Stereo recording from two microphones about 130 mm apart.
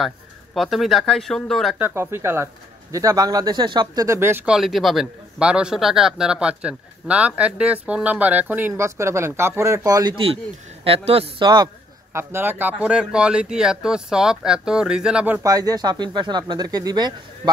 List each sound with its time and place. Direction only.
0.6 s speech: centre (ahead or behind)
1.8 s speech: 20° right (ahead or behind)
4.5 s a man's voice: centre (ahead or behind); by 10.1 s 30° right (ahead or behind)
10.1 s speech: 45° right (ahead or behind)
12.1 s a man's voice: 20° right (ahead or behind)
15.4 s speech: 30° right (ahead or behind)